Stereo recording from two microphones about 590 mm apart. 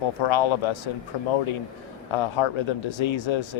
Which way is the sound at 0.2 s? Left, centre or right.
Left.